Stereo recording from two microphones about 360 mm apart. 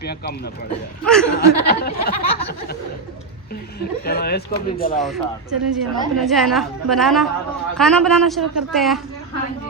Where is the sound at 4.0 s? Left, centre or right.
Left.